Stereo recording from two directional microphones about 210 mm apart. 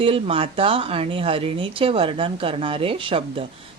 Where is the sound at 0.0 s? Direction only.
25° right (ahead or behind).